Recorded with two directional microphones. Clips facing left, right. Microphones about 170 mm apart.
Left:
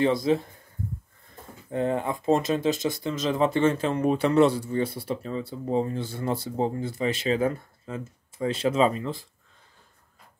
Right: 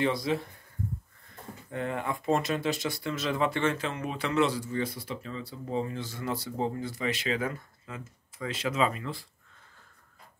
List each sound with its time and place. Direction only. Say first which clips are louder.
0.0 s speech: left 6 dB; 25° left (ahead or behind)
1.7 s speech: left 6 dB; 30° left (ahead or behind)
5.0 s speech: left 7 dB; 40° left (ahead or behind)
6.0 s speech: left 5 dB; 30° left (ahead or behind)